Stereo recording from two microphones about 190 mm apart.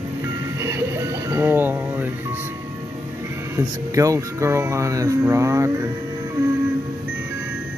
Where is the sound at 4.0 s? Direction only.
15° right (ahead or behind).